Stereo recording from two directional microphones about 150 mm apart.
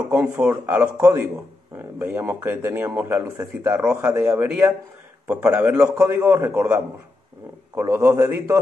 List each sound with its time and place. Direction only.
0.1 s speech: 10° right (ahead or behind)